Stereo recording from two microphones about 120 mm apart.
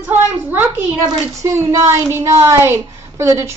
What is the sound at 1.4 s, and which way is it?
A woman's voice, 25° right (ahead or behind).